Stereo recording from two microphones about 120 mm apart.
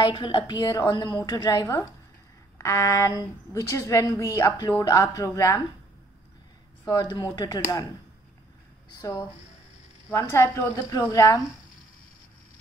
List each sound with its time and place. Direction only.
0.0 s a woman's voice: 40° left (ahead or behind)
6.9 s a woman's voice: 35° left (ahead or behind)
10.3 s a woman's voice: 20° left (ahead or behind)